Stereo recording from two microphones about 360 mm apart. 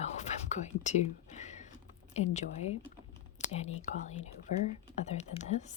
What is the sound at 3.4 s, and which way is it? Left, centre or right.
Whispering, centre.